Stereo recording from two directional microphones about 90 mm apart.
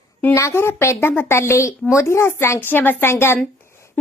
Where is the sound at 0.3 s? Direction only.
30° left (ahead or behind).